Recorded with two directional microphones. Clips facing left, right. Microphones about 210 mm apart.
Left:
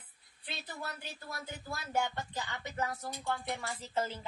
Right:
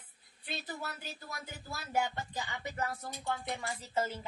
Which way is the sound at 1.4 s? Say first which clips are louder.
Left 2 dB; 10° right (ahead or behind).